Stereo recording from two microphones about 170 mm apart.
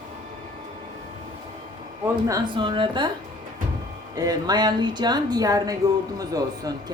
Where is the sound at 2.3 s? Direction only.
25° right (ahead or behind).